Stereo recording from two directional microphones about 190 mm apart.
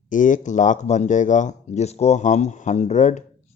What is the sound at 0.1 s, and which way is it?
Speech, 40° left (ahead or behind).